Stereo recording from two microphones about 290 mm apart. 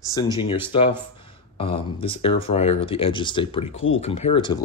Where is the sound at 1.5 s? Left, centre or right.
Centre.